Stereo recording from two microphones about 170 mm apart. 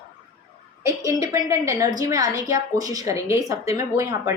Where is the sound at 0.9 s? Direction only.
20° right (ahead or behind).